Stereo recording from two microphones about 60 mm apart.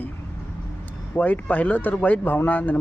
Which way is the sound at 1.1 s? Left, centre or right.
Left.